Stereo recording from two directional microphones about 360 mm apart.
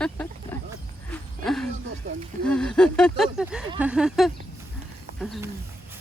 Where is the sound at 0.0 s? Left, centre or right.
Centre.